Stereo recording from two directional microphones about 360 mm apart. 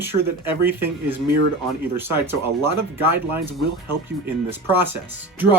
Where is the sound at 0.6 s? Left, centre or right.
Centre.